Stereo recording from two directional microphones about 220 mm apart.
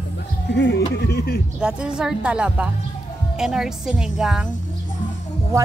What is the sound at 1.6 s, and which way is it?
Speech, 5° right (ahead or behind).